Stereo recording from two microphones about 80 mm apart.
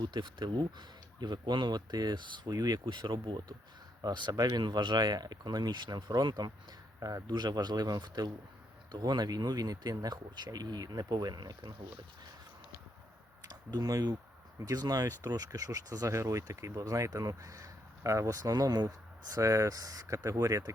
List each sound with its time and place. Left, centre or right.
0.3 s speech: right
4.0 s speech: right
13.5 s speech: right